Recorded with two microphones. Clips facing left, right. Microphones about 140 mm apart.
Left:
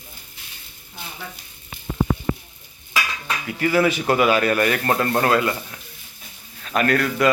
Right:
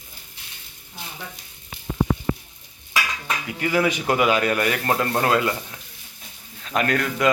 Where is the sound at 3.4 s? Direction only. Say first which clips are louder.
Left 3 dB; 15° right (ahead or behind).